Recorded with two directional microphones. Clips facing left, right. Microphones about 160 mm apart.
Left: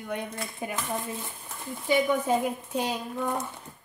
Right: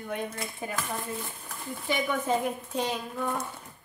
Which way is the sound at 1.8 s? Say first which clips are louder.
Left 5 dB; 10° left (ahead or behind).